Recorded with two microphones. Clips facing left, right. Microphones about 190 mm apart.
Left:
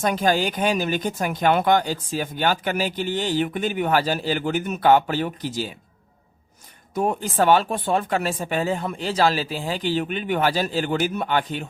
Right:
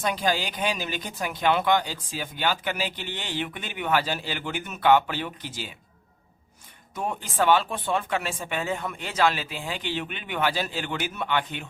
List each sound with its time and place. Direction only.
0.0 s speech: 45° left (ahead or behind)
6.9 s speech: 40° left (ahead or behind)